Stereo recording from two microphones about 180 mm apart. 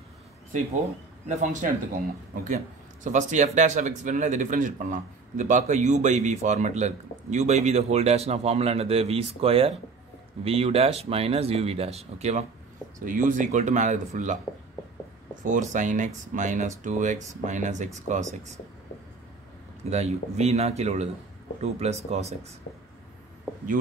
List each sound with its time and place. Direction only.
1.3 s a man's voice: 45° right (ahead or behind)
15.4 s speech: 45° right (ahead or behind)
19.9 s a man's voice: 35° right (ahead or behind)